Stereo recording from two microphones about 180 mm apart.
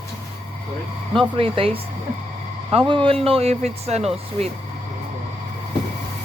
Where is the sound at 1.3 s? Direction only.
30° right (ahead or behind).